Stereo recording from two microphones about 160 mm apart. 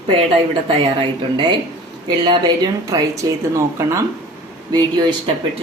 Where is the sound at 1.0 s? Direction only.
30° right (ahead or behind).